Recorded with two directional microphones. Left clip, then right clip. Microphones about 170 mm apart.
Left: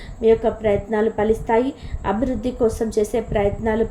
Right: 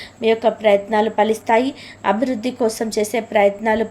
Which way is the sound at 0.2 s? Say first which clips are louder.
Even; 20° right (ahead or behind).